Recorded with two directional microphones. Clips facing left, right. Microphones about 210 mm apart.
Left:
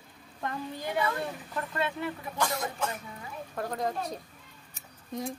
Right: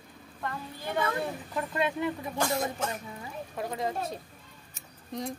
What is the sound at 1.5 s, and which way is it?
Speech, 15° right (ahead or behind).